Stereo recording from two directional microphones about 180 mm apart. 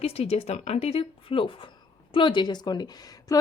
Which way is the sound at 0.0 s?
35° left (ahead or behind).